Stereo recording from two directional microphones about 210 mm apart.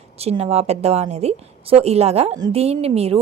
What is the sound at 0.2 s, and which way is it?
A woman's voice, 30° right (ahead or behind).